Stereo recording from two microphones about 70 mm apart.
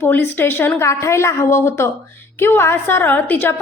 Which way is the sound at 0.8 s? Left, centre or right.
Left.